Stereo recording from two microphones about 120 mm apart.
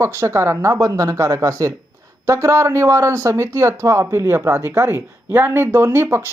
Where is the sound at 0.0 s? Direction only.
20° right (ahead or behind).